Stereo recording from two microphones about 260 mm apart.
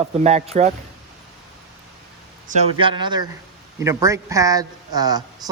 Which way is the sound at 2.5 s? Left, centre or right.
Right.